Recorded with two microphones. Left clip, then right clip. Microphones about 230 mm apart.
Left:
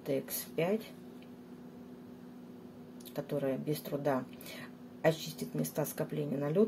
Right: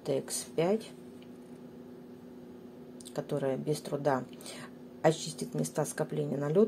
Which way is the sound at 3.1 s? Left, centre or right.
Centre.